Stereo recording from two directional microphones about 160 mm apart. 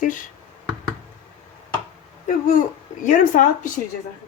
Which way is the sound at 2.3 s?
55° left (ahead or behind).